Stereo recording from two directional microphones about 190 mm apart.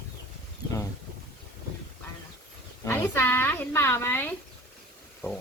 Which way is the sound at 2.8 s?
10° left (ahead or behind).